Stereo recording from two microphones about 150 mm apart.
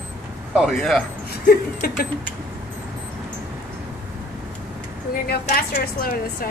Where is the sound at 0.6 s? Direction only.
Centre (ahead or behind).